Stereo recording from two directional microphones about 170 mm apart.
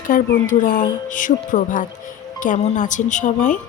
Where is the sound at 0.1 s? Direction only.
55° left (ahead or behind).